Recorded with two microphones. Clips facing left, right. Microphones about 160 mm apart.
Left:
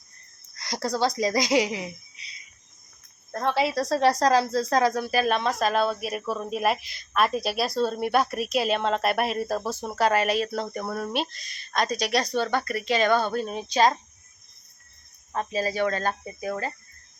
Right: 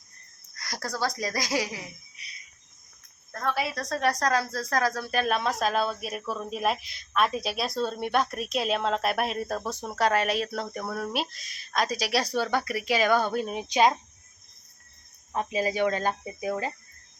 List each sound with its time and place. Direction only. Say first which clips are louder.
0.5 s a woman's voice: left 6 dB; 25° left (ahead or behind)
3.3 s a woman's voice: left 5 dB; 25° left (ahead or behind)
5.1 s speech: left 3 dB; centre (ahead or behind)
15.3 s speech: even; 10° right (ahead or behind)